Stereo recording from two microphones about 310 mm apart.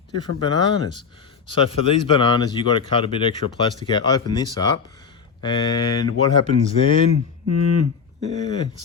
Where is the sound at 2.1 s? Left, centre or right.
Centre.